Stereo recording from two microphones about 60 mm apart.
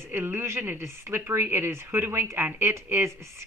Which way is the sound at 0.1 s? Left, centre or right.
Right.